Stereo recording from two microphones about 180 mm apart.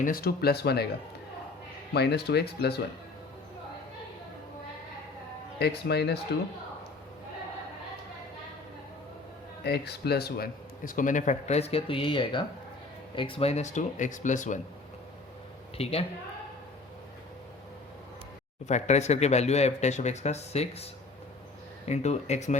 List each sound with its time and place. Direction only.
0.0 s speech: 55° left (ahead or behind)
1.9 s speech: 65° left (ahead or behind)
5.5 s speech: 65° left (ahead or behind)
9.6 s speech: 65° left (ahead or behind); by 14.6 s 45° left (ahead or behind)
15.8 s speech: 35° left (ahead or behind)
18.6 s speech: 40° left (ahead or behind)